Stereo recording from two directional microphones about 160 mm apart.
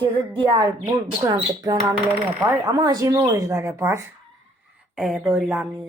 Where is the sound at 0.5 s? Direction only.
25° right (ahead or behind).